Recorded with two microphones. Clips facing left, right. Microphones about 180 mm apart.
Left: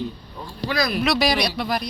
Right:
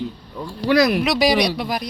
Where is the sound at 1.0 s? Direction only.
15° right (ahead or behind).